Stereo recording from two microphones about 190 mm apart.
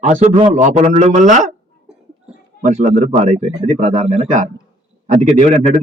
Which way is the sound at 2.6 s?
35° right (ahead or behind).